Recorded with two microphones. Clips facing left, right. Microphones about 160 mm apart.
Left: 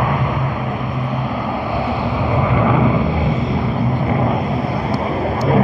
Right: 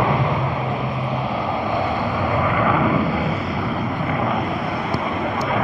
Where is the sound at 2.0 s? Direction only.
15° left (ahead or behind).